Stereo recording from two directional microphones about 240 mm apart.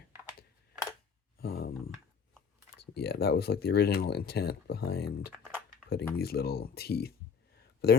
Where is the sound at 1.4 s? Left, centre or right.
Left.